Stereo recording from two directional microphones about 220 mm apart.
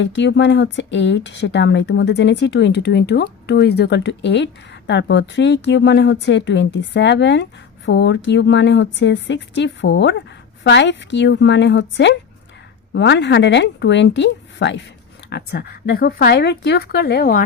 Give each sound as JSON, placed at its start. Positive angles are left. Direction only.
{"t": 0.0, "sound": "speech", "side_deg": 55}